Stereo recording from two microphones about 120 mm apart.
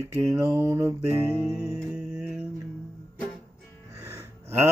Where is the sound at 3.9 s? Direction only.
25° right (ahead or behind).